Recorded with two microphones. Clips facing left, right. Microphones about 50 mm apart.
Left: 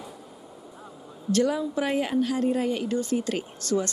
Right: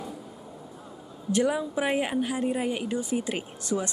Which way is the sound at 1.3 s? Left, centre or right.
Centre.